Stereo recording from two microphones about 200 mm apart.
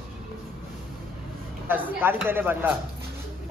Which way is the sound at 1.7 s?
10° right (ahead or behind).